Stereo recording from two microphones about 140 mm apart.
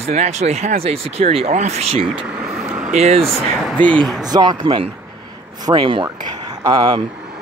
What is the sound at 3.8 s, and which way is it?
Speech, 5° left (ahead or behind).